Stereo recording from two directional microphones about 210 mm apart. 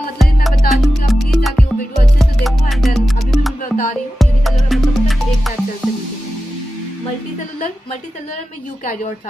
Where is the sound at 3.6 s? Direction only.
40° left (ahead or behind).